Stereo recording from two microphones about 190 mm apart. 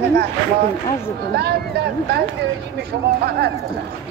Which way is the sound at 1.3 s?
60° right (ahead or behind).